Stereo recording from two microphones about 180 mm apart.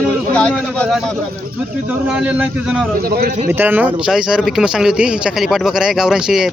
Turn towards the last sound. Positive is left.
turn(degrees=-5)  # may be behind; listen again after turning